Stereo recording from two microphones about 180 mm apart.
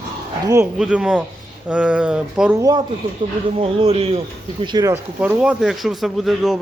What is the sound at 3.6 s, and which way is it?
Speech, 30° right (ahead or behind).